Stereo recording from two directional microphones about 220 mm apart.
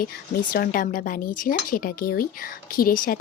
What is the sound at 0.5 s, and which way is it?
Speech, 40° left (ahead or behind).